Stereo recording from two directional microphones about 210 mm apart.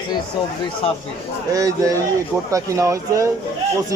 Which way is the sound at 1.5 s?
15° right (ahead or behind).